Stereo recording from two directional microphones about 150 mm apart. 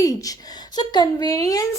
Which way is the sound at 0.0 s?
25° left (ahead or behind).